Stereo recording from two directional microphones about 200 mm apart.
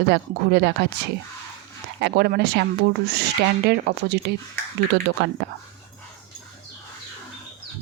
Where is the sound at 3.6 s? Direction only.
55° right (ahead or behind).